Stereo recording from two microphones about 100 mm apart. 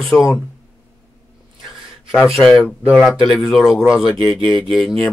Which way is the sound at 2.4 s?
5° left (ahead or behind).